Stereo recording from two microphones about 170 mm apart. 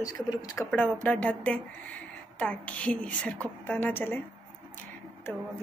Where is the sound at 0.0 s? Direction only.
20° left (ahead or behind).